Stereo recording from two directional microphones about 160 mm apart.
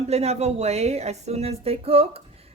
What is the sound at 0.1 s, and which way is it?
Speech, 40° right (ahead or behind).